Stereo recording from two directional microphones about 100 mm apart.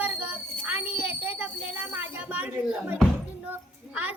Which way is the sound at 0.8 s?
65° left (ahead or behind).